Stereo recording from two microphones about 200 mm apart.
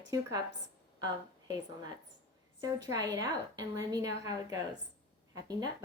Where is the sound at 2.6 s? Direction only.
20° right (ahead or behind).